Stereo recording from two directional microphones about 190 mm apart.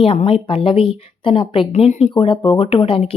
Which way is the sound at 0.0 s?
30° left (ahead or behind).